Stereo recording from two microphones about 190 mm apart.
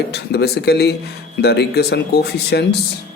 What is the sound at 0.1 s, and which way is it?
Speech, 60° left (ahead or behind).